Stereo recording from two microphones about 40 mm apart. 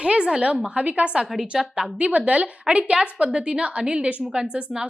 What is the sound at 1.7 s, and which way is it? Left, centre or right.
A woman's voice, right.